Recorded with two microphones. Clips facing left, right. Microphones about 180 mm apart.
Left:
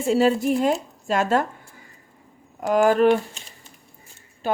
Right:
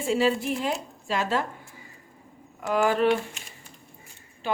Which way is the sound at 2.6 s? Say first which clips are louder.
Left 5 dB; 45° left (ahead or behind).